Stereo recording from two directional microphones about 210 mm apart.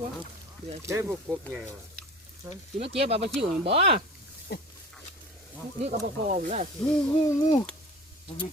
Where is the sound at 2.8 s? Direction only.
30° right (ahead or behind).